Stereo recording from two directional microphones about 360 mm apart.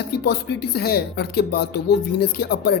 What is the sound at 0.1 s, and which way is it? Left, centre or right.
Speech, left.